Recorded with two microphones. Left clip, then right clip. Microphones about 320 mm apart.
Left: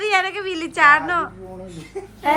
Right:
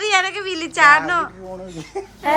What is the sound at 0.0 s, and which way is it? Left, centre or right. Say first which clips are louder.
A woman's voice: right 1 dB; centre.